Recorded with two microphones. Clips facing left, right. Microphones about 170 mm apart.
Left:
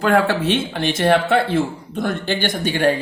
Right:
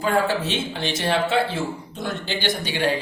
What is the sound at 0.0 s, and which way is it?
Speech, 70° left (ahead or behind).